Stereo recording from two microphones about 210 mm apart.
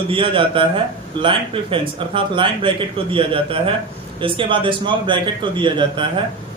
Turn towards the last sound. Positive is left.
turn(degrees=-25)  # may be behind; listen again after turning